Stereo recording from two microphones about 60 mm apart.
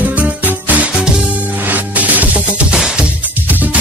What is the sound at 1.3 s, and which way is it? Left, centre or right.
Music, right.